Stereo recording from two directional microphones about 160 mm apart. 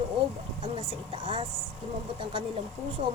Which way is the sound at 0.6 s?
35° right (ahead or behind).